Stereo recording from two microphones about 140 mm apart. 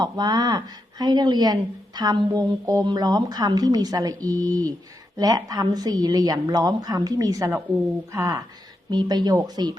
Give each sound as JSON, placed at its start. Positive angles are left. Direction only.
{"t": 0.0, "sound": "speech", "side_deg": -30}